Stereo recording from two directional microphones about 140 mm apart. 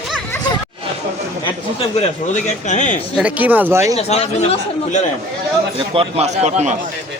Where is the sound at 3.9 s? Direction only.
50° left (ahead or behind).